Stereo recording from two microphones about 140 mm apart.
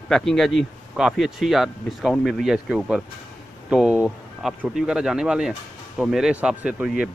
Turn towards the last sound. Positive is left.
turn(degrees=-5)  # may be behind; listen again after turning